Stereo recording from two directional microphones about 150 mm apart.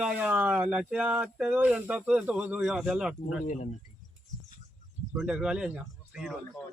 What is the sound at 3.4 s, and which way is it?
Speech, 55° left (ahead or behind).